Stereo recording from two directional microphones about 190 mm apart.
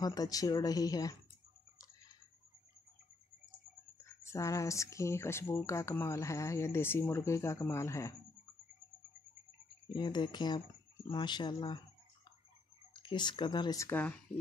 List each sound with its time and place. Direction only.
0.0 s speech: 20° left (ahead or behind)
4.2 s a sound: 15° left (ahead or behind)
9.9 s speech: 25° left (ahead or behind)
13.0 s speech: 25° left (ahead or behind)